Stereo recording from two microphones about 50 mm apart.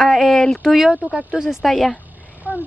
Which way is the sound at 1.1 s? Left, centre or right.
Centre.